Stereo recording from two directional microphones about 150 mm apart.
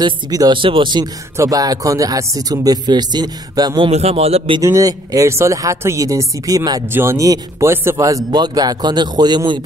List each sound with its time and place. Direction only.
0.0 s speech: 30° right (ahead or behind)
1.3 s speech: 20° right (ahead or behind); by 4.6 s 40° right (ahead or behind)
4.6 s speech: 20° right (ahead or behind)